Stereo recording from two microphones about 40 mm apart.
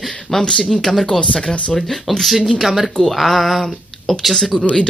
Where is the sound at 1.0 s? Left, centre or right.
Centre.